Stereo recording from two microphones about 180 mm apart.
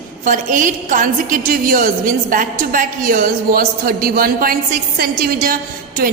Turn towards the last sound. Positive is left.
turn(degrees=-50)  # may be behind; listen again after turning